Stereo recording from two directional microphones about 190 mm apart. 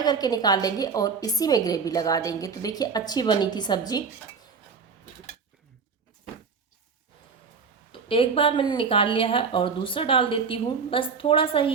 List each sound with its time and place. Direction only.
0.0 s a woman's voice: 20° left (ahead or behind)
7.9 s a woman's voice: 30° left (ahead or behind)